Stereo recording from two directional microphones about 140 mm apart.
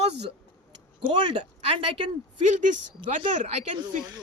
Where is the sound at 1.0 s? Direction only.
35° right (ahead or behind).